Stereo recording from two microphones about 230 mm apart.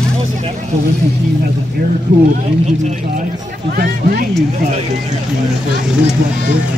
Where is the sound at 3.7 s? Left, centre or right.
Right.